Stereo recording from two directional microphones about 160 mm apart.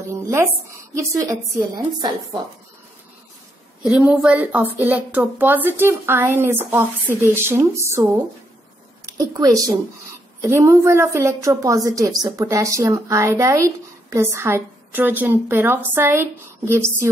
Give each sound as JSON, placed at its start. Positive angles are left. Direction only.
{"t": 0.1, "sound": "a sound", "side_deg": -15}
{"t": 0.9, "sound": "a woman's voice", "side_deg": -20}
{"t": 3.8, "sound": "a woman's voice", "side_deg": -10}